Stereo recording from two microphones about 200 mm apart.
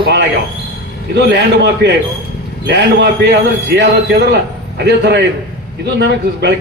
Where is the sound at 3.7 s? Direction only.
55° right (ahead or behind).